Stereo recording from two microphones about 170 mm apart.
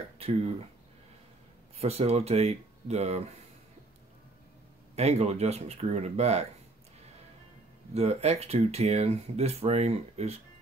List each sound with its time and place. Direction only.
1.8 s speech: 35° right (ahead or behind)
4.9 s speech: 40° right (ahead or behind)
7.9 s speech: 40° right (ahead or behind)